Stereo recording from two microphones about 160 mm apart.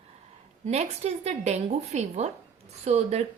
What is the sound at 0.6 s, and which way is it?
A woman's voice, 45° right (ahead or behind).